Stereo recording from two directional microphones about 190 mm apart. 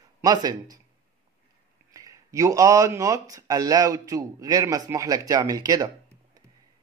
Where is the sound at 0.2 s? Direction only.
20° right (ahead or behind).